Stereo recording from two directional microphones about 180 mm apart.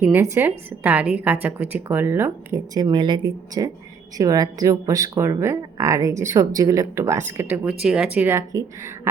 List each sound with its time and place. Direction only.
0.0 s speech: 15° right (ahead or behind)